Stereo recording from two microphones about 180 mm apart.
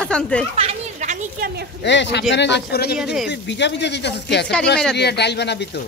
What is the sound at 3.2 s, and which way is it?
Speech, 75° left (ahead or behind).